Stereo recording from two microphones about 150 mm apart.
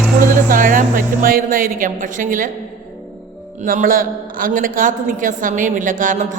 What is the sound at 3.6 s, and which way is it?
A man's voice, 60° right (ahead or behind).